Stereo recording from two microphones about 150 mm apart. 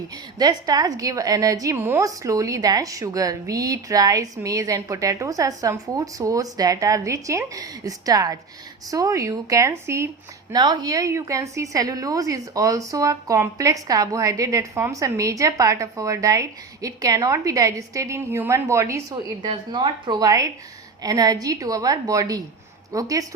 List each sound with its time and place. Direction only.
0.3 s a woman's voice: 25° right (ahead or behind)